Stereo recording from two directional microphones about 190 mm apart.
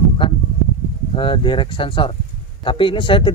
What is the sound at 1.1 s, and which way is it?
A man's voice, 25° left (ahead or behind).